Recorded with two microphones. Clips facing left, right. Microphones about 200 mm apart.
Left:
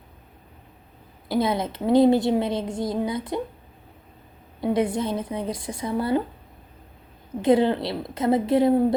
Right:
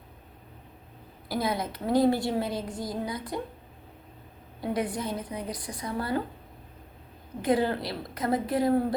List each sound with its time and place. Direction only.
1.3 s a woman's voice: 25° left (ahead or behind)
4.6 s a woman's voice: 25° left (ahead or behind)
7.4 s a woman's voice: 25° left (ahead or behind)